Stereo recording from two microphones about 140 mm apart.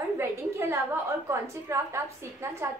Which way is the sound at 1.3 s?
20° right (ahead or behind).